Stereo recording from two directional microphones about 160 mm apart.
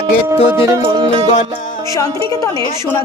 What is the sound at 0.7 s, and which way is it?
Music, 25° right (ahead or behind).